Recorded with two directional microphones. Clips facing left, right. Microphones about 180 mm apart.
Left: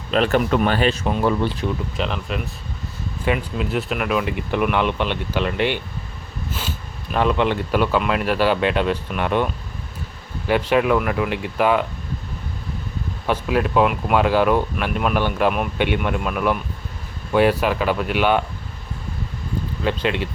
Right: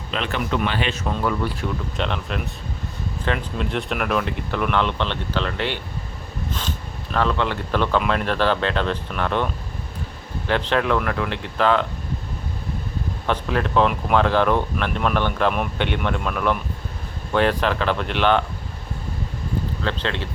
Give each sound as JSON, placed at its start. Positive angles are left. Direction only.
{"t": 0.1, "sound": "speech", "side_deg": 45}
{"t": 1.0, "sound": "speech", "side_deg": 25}
{"t": 2.0, "sound": "speech", "side_deg": 0}
{"t": 13.2, "sound": "speech", "side_deg": 10}
{"t": 19.8, "sound": "speech", "side_deg": 15}